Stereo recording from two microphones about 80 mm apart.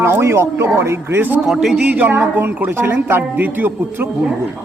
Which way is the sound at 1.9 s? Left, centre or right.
Right.